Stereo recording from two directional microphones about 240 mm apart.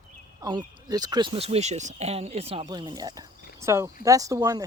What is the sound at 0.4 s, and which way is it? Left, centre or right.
Speech, centre.